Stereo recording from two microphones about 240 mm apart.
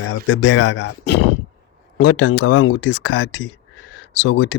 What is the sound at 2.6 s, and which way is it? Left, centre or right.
Speech, left.